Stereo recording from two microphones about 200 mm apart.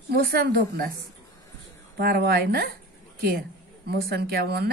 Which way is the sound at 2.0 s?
50° right (ahead or behind).